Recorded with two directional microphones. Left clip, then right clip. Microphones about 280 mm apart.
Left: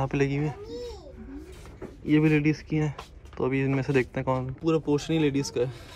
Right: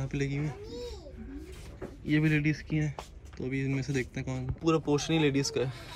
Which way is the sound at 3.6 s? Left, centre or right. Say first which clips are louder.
Left 7 dB; left.